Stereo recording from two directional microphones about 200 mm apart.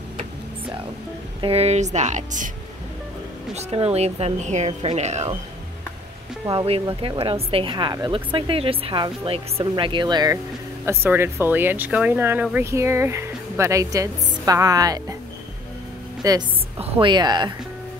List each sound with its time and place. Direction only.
1.4 s speech: 30° right (ahead or behind)
3.5 s speech: 30° right (ahead or behind)
6.4 s speech: 25° right (ahead or behind)
16.2 s speech: 15° right (ahead or behind)